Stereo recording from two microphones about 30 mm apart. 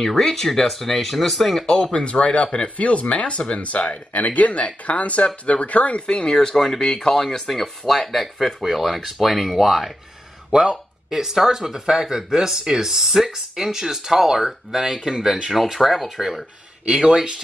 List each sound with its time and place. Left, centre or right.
0.0 s speech: centre
1.7 s speech: left
2.0 s speech: left
4.2 s speech: left
5.9 s speech: left
6.5 s speech: centre
10.5 s speech: right
15.9 s speech: centre
17.0 s speech: right